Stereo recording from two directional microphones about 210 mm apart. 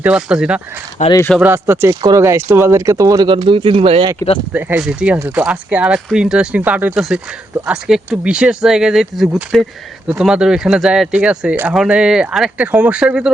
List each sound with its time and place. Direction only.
0.0 s speech: 5° right (ahead or behind)
1.0 s speech: 35° left (ahead or behind)
1.4 s speech: 10° right (ahead or behind); by 4.1 s 25° right (ahead or behind)
4.5 s speech: 5° right (ahead or behind)